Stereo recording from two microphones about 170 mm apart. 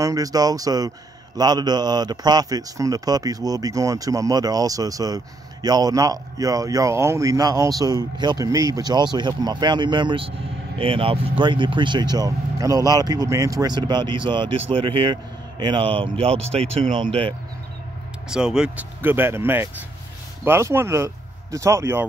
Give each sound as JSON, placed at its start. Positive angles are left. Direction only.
{"t": 0.0, "sound": "a man's voice", "side_deg": -20}
{"t": 18.3, "sound": "speech", "side_deg": -5}